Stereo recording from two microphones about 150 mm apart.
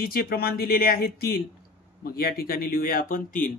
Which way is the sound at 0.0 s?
90° left.